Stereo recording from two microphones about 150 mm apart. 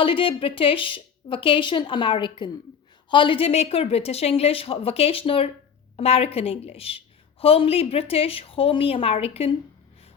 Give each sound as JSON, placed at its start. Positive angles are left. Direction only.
{"t": 0.0, "sound": "a woman's voice", "side_deg": 35}